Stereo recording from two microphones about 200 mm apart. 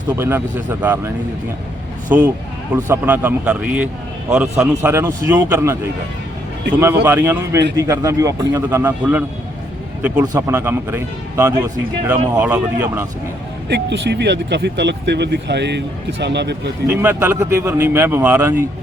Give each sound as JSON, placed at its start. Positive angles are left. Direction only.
{"t": 0.2, "sound": "speech", "side_deg": -10}
{"t": 6.7, "sound": "speech", "side_deg": -10}
{"t": 10.3, "sound": "speech", "side_deg": -15}
{"t": 13.7, "sound": "speech", "side_deg": -55}
{"t": 16.9, "sound": "speech", "side_deg": -10}